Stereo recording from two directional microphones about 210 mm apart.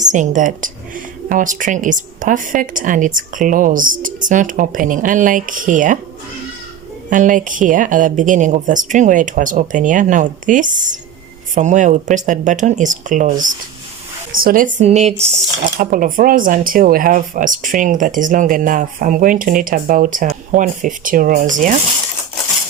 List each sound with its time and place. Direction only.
0.0 s speech: 35° right (ahead or behind)
7.1 s speech: 40° right (ahead or behind)